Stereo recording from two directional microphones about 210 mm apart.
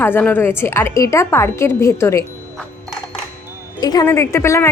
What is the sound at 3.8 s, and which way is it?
Speech, 20° left (ahead or behind).